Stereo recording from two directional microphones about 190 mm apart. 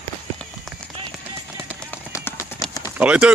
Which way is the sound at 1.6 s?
10° left (ahead or behind).